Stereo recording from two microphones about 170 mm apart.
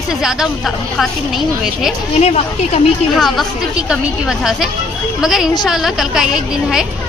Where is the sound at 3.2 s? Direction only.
Centre (ahead or behind).